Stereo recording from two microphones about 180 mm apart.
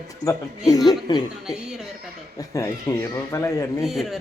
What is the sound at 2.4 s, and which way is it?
Speech, 15° left (ahead or behind).